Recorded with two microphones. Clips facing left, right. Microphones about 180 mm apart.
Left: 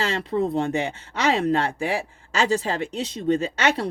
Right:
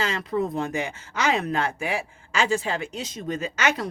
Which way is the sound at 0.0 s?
30° left (ahead or behind).